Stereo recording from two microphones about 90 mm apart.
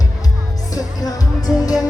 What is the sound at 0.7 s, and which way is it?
Music, 45° left (ahead or behind).